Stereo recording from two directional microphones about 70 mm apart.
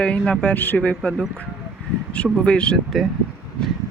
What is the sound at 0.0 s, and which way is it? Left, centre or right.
Speech, centre.